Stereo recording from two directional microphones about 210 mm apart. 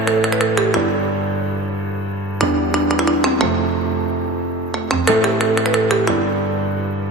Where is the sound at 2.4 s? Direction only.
Centre (ahead or behind).